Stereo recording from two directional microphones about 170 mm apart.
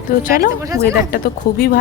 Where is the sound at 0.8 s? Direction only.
60° left (ahead or behind).